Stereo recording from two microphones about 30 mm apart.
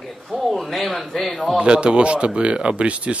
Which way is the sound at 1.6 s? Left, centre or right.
Right.